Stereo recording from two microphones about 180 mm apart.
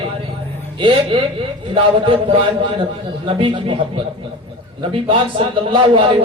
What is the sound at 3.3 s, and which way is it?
Speech, 30° right (ahead or behind).